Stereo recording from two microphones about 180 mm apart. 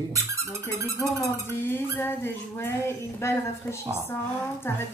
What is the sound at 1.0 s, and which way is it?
A woman's voice, 15° left (ahead or behind).